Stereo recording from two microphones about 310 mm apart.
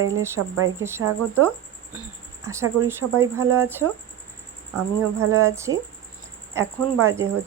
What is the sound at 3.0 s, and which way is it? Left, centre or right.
Speech, right.